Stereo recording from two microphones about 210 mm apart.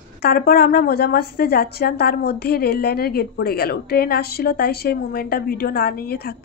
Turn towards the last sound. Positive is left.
turn(degrees=45)  # may be behind; listen again after turning